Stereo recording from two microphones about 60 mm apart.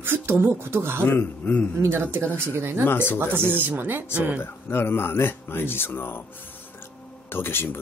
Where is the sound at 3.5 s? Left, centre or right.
Right.